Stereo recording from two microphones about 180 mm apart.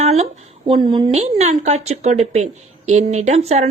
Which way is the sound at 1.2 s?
40° right (ahead or behind).